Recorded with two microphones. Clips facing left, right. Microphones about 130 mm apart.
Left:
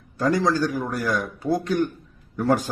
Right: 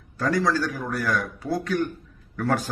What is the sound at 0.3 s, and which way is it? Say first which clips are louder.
A man's voice: left 2 dB; 20° left (ahead or behind).